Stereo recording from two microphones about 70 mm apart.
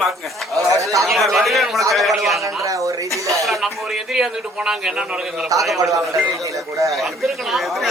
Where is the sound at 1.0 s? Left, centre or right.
Centre.